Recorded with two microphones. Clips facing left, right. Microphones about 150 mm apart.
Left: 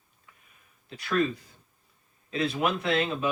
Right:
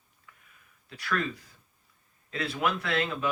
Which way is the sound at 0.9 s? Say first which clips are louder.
Left 3 dB; 25° left (ahead or behind).